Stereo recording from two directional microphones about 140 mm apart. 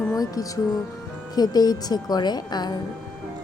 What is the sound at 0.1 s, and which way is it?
Music, 25° left (ahead or behind).